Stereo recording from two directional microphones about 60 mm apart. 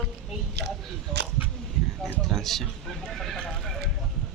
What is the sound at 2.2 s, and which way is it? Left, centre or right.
Speech, centre.